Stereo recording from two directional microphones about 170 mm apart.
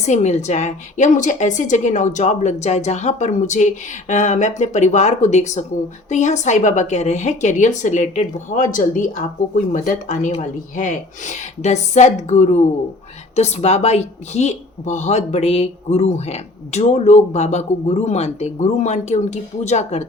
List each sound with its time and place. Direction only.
0.0 s a woman's voice: 45° left (ahead or behind)